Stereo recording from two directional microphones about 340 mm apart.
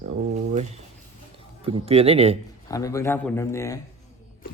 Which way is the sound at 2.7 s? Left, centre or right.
Centre.